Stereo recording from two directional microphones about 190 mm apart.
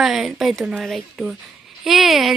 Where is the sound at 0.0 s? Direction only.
Centre (ahead or behind).